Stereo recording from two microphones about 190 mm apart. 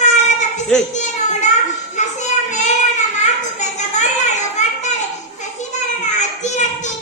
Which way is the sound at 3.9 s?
40° left (ahead or behind).